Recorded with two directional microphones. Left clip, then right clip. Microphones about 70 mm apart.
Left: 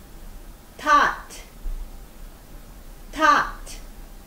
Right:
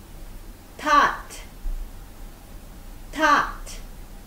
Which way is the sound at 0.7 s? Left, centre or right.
Right.